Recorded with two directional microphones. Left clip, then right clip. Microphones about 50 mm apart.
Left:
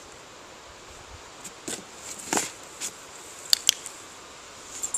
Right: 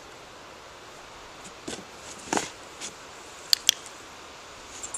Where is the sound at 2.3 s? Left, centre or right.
Centre.